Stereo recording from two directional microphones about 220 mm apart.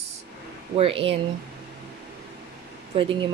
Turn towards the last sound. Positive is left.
turn(degrees=-25)  # may be behind; listen again after turning